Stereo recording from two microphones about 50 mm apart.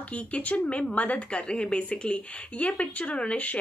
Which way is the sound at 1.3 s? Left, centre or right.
Left.